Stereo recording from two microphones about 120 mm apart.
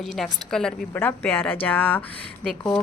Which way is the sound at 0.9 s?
15° left (ahead or behind).